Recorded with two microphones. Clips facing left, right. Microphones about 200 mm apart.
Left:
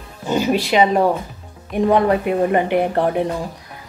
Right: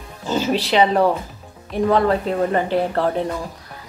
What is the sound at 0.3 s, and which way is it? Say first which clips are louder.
A woman's voice: left 2 dB; 10° left (ahead or behind).